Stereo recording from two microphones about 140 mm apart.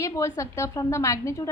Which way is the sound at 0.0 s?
20° left (ahead or behind).